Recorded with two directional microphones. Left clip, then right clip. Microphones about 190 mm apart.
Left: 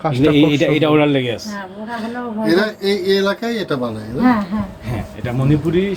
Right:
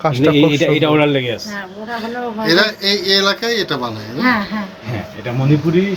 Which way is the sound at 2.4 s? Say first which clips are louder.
Right 3 dB; 45° left (ahead or behind).